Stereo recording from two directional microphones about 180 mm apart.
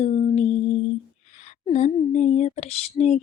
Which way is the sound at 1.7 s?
40° left (ahead or behind).